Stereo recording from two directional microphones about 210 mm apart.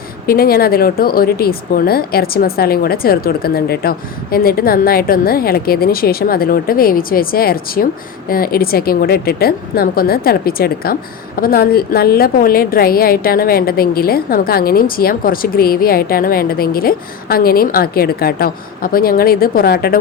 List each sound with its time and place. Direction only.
0.3 s a woman's voice: 45° left (ahead or behind)